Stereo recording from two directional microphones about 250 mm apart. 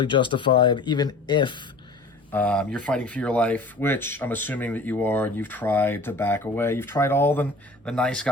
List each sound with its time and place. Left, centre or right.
0.0 s speech: centre
2.3 s speech: centre